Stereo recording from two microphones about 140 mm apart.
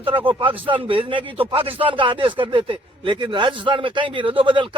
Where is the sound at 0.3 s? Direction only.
40° right (ahead or behind).